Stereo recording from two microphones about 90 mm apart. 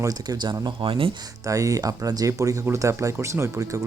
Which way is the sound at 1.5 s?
40° right (ahead or behind).